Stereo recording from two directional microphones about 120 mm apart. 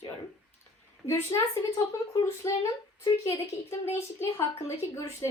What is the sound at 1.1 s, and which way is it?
A woman's voice, 20° left (ahead or behind).